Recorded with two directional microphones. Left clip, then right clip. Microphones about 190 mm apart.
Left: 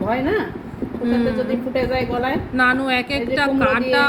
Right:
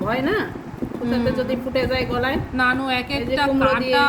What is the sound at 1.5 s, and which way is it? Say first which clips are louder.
Speech: left 1 dB; 60° right (ahead or behind).